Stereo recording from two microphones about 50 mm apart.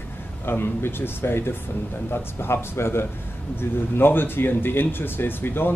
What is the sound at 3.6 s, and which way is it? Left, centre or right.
A man's voice, left.